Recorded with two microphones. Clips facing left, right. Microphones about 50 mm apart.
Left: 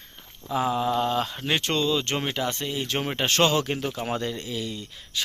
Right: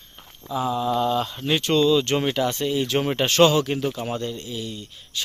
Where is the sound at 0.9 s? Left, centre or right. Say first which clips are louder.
Right 2 dB; left.